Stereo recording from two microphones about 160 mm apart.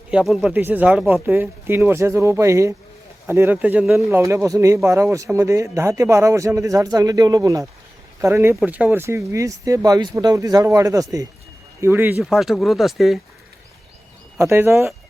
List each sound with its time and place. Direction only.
0.1 s speech: centre (ahead or behind)
12.2 s speech: centre (ahead or behind)
14.3 s speech: 15° right (ahead or behind)